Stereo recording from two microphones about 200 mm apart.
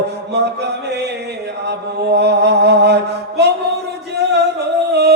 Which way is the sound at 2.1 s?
55° right (ahead or behind).